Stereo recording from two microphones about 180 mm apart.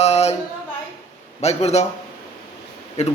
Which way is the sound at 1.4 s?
35° left (ahead or behind).